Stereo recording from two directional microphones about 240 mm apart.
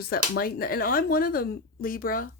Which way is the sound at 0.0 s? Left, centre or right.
Left.